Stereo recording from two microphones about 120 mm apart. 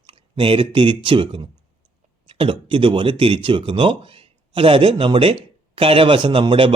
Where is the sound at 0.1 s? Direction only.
45° right (ahead or behind).